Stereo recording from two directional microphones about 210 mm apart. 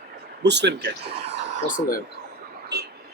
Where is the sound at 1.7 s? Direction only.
40° left (ahead or behind).